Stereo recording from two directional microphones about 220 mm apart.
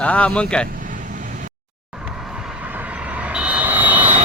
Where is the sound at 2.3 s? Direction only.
5° right (ahead or behind).